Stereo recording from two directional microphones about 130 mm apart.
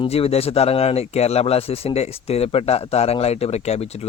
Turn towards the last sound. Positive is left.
turn(degrees=55)  # may be behind; listen again after turning